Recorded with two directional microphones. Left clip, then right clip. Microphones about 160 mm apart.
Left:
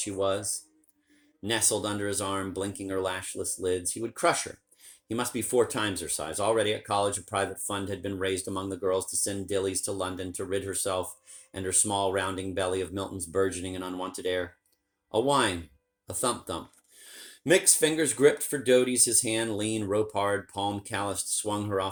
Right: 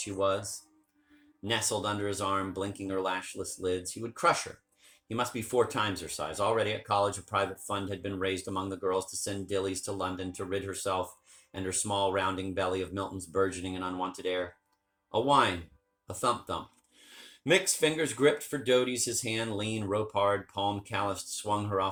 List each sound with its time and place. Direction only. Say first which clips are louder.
0.0 s speech: left 1 dB; 75° left (ahead or behind)
1.5 s speech: left 2 dB; 75° left (ahead or behind)